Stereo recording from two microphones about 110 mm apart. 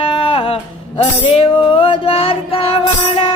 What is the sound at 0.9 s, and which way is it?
Music, 60° left (ahead or behind).